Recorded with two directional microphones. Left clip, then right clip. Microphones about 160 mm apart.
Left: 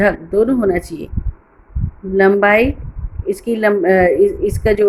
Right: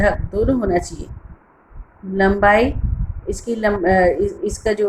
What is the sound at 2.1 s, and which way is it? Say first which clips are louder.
Speech: left 3 dB; 50° left (ahead or behind).